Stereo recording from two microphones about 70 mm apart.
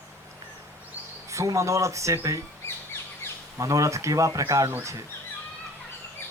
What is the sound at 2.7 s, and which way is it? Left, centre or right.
Bird, left.